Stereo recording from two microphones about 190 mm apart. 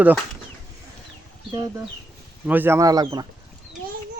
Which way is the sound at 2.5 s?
10° right (ahead or behind).